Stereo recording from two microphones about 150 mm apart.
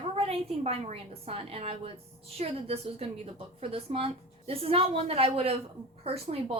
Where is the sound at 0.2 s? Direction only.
40° right (ahead or behind).